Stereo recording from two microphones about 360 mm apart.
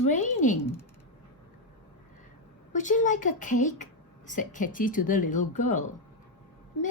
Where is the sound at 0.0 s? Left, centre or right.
Left.